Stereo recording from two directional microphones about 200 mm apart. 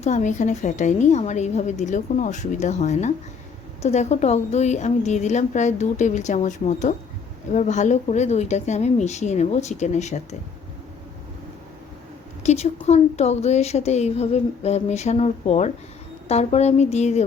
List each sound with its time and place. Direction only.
0.0 s speech: 35° left (ahead or behind)
12.4 s speech: 35° left (ahead or behind)